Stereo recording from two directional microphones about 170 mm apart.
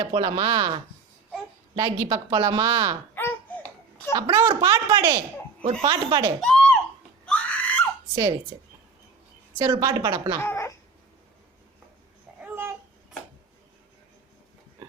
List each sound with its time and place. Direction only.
0.0 s a woman's voice: 30° right (ahead or behind)
3.2 s laughter: 10° left (ahead or behind)
4.1 s a woman's voice: 25° right (ahead or behind)
6.4 s a sound: 5° left (ahead or behind)
7.3 s screaming: 10° left (ahead or behind)
8.1 s speech: 25° right (ahead or behind)
9.6 s a woman's voice: 25° right (ahead or behind)
10.4 s cat: 15° left (ahead or behind)
12.4 s babbling: 10° right (ahead or behind)